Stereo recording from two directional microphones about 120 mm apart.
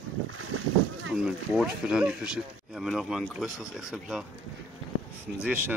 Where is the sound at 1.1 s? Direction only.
10° right (ahead or behind).